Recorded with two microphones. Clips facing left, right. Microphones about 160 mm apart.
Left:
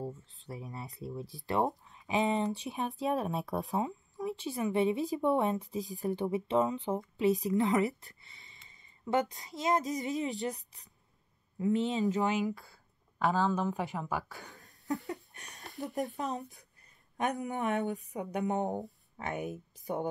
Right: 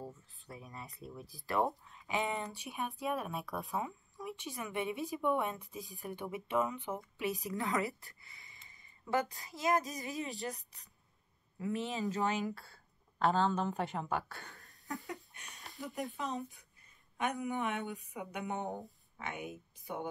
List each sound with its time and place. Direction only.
0.0 s speech: 25° left (ahead or behind)
15.3 s a sound: 40° left (ahead or behind)
15.8 s speech: 40° left (ahead or behind)